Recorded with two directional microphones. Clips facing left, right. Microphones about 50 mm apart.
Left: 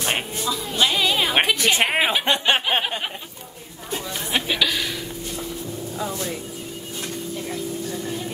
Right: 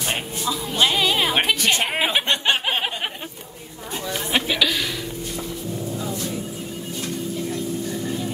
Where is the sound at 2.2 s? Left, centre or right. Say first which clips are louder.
Left 1 dB; centre.